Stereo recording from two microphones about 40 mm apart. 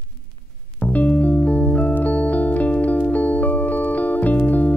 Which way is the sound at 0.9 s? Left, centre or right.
Left.